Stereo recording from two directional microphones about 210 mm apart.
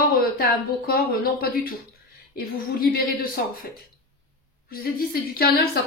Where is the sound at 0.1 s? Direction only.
45° left (ahead or behind).